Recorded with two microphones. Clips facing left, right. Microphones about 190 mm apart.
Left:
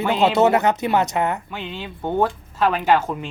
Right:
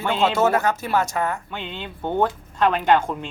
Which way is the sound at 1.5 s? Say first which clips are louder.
Left 1 dB; 5° left (ahead or behind).